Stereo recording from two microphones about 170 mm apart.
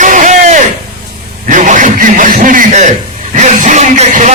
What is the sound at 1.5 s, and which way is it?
A man's voice, 50° right (ahead or behind).